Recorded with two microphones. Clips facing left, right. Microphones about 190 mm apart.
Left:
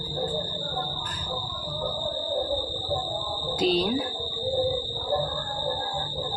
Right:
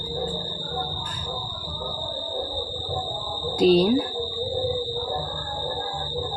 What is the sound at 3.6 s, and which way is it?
Speech, 40° right (ahead or behind).